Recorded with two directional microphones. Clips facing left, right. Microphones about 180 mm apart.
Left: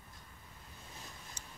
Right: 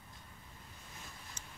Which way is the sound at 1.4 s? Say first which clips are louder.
Even; 35° left (ahead or behind).